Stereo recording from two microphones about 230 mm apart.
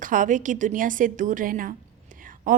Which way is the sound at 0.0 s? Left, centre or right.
Right.